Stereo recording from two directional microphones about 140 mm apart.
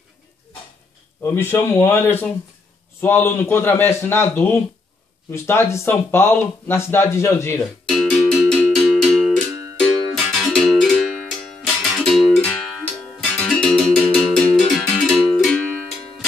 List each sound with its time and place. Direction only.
1.2 s speech: 15° left (ahead or behind)
7.9 s music: centre (ahead or behind)